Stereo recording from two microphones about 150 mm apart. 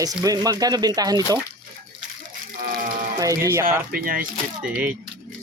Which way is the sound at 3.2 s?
20° right (ahead or behind).